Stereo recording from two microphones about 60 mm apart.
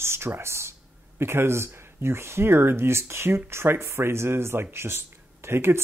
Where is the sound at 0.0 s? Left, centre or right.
Right.